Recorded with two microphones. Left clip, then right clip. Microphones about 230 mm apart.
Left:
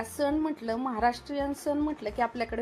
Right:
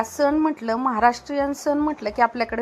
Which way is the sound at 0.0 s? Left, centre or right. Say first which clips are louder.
Right 9 dB; centre.